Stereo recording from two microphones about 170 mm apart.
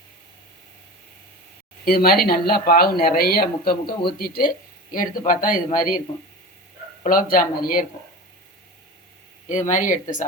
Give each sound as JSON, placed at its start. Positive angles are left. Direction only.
{"t": 1.8, "sound": "speech", "side_deg": 65}
{"t": 7.0, "sound": "speech", "side_deg": 55}
{"t": 9.5, "sound": "speech", "side_deg": 45}